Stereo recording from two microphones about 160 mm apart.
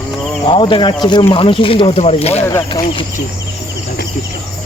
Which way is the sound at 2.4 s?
15° left (ahead or behind).